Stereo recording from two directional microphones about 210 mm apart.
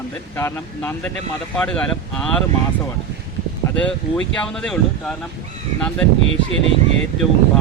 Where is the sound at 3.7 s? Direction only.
5° left (ahead or behind).